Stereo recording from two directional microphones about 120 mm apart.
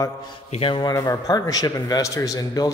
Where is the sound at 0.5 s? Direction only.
45° left (ahead or behind).